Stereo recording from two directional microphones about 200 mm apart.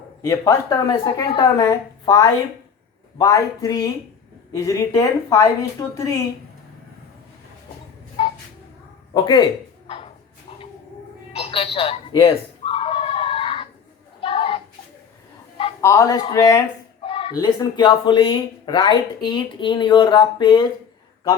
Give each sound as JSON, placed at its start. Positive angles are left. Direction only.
{"t": 0.2, "sound": "speech", "side_deg": 15}
{"t": 8.2, "sound": "a sound", "side_deg": 30}
{"t": 9.1, "sound": "speech", "side_deg": 20}
{"t": 9.8, "sound": "chopping", "side_deg": 25}
{"t": 11.3, "sound": "a sound", "side_deg": 30}
{"t": 15.8, "sound": "speech", "side_deg": 15}
{"t": 17.0, "sound": "speech", "side_deg": 25}